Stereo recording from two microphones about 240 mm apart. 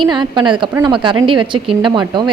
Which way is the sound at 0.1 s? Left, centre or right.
Centre.